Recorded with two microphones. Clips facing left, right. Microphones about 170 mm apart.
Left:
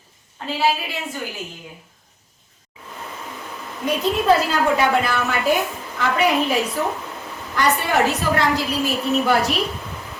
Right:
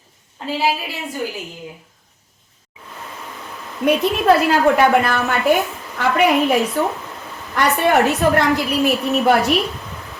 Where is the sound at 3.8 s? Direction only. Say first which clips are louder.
Right 4 dB; 65° right (ahead or behind).